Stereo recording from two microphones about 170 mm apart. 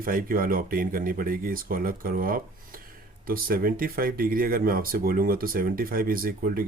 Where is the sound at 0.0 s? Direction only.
55° right (ahead or behind).